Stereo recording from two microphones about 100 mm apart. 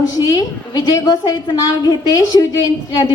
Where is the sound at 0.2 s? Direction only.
35° left (ahead or behind).